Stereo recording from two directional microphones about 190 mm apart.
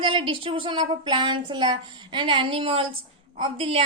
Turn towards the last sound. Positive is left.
turn(degrees=-30)  # may be behind; listen again after turning